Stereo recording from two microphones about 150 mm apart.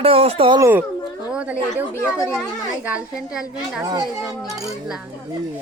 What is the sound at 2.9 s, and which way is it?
A woman's voice, 5° right (ahead or behind).